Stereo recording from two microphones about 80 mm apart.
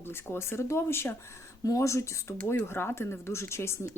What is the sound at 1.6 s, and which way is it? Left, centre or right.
Speech, left.